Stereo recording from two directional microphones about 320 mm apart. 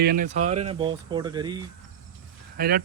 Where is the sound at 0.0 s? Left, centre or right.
Right; by 1.6 s centre.